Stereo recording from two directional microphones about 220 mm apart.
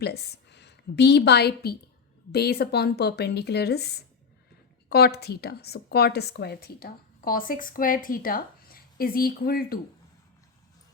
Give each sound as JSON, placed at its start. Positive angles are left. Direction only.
{"t": 0.0, "sound": "a woman's voice", "side_deg": 50}